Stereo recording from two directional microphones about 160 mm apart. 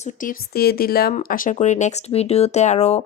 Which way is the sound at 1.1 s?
60° left (ahead or behind).